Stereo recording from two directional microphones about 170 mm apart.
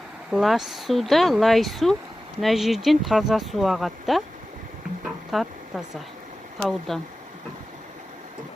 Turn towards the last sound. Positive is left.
turn(degrees=0)  # may be behind; listen again after turning